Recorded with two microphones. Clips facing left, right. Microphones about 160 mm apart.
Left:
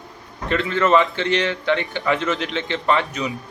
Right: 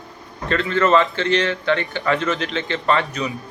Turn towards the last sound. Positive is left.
turn(degrees=15)  # may be behind; listen again after turning